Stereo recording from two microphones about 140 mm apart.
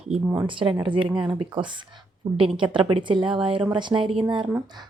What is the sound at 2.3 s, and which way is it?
Speech, 40° right (ahead or behind).